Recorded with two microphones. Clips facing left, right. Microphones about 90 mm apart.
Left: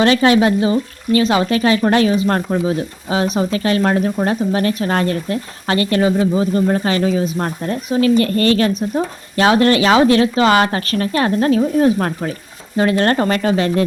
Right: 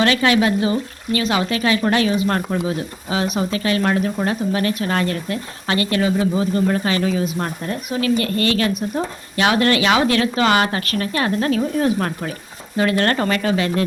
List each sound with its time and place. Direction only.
0.0 s speech: 30° left (ahead or behind)